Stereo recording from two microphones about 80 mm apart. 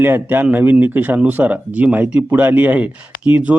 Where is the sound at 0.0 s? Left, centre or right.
Right.